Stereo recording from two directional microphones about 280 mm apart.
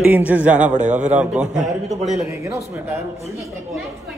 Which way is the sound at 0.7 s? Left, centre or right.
Right.